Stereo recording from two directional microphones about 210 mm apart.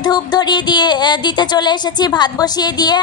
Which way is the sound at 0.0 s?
20° left (ahead or behind).